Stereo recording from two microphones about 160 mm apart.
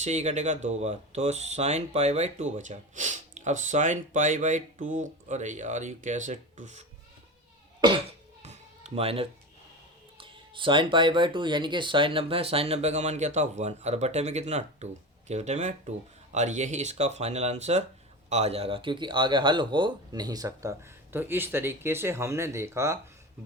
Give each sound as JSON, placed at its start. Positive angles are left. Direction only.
{"t": 0.0, "sound": "speech", "side_deg": -45}
{"t": 8.4, "sound": "music", "side_deg": -45}
{"t": 10.2, "sound": "speech", "side_deg": -30}